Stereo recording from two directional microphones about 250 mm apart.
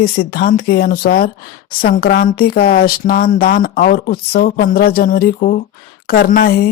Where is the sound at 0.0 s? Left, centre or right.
Left.